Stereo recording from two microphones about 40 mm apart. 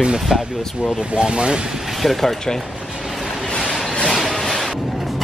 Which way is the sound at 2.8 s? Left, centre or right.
Centre.